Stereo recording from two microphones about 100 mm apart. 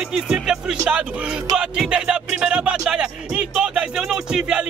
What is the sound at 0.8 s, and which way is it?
Speech, 15° right (ahead or behind).